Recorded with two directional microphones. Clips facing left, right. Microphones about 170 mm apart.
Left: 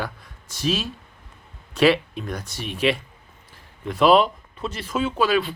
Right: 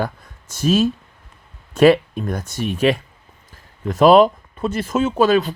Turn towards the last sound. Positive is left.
turn(degrees=-45)  # may be behind; listen again after turning